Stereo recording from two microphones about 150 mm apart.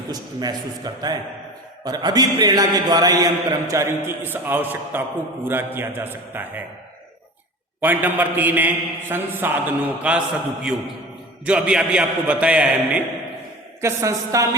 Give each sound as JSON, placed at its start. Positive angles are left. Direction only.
{"t": 0.1, "sound": "a man's voice", "side_deg": -25}
{"t": 7.8, "sound": "a man's voice", "side_deg": -10}
{"t": 13.8, "sound": "a man's voice", "side_deg": -20}